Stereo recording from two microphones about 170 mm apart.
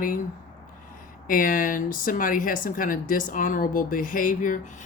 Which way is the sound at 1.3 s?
55° left (ahead or behind).